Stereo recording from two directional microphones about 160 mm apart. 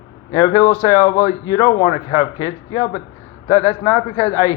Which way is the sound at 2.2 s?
25° left (ahead or behind).